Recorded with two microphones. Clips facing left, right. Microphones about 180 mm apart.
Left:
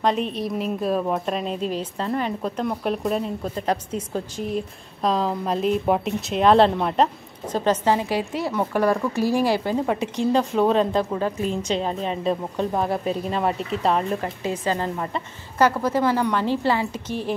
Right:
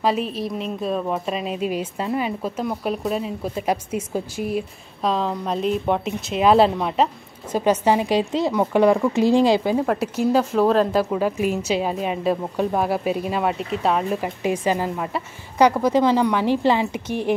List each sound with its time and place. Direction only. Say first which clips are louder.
0.0 s speech: even; 5° right (ahead or behind)
9.8 s speech: right 2 dB; 5° right (ahead or behind)